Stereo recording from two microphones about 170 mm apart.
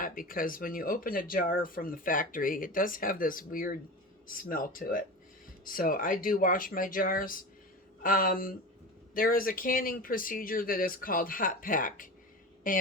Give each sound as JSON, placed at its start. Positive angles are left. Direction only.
{"t": 0.0, "sound": "speech", "side_deg": 55}